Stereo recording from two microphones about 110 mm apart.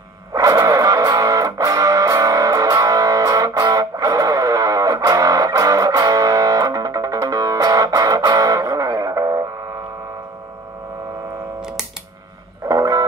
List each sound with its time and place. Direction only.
0.3 s music: 30° right (ahead or behind)
12.6 s music: 35° right (ahead or behind)